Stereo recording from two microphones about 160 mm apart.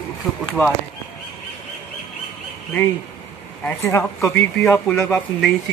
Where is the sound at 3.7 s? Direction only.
15° left (ahead or behind).